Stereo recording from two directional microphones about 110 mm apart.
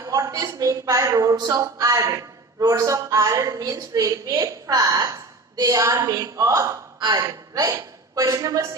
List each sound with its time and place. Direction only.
0.0 s speech: 30° right (ahead or behind)